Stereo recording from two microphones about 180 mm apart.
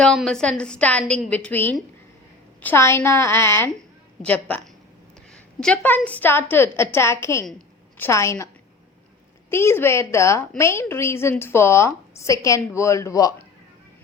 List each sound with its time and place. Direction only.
0.0 s a woman's voice: centre (ahead or behind)
5.3 s a sound: 5° left (ahead or behind)
6.1 s a woman's voice: 10° left (ahead or behind)
9.5 s a woman's voice: 15° left (ahead or behind)